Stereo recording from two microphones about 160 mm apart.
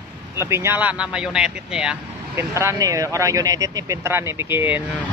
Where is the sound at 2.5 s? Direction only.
20° right (ahead or behind).